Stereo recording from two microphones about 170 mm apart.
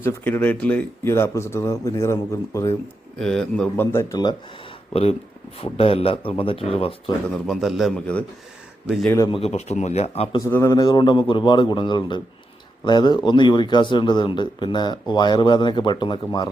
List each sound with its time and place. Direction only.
0.0 s speech: 10° left (ahead or behind)
3.2 s speech: 5° left (ahead or behind); by 4.4 s 20° left (ahead or behind)
5.5 s speech: 35° left (ahead or behind)
7.3 s a man's voice: centre (ahead or behind)
9.0 s speech: 15° left (ahead or behind)
9.3 s speech: 40° left (ahead or behind)
10.3 s speech: 15° left (ahead or behind)